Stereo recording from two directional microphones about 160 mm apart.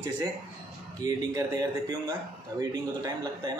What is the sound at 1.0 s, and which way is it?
A man's voice, 20° right (ahead or behind).